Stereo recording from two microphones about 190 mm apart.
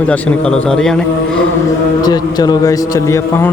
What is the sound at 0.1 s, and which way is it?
Speech, 5° left (ahead or behind).